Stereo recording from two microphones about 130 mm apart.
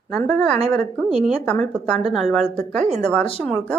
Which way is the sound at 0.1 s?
5° left (ahead or behind).